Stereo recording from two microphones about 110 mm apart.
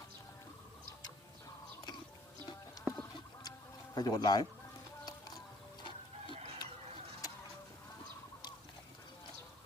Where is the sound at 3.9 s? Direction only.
35° left (ahead or behind).